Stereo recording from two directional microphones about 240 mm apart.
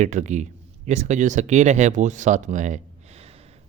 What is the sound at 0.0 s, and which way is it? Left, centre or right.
Speech, right.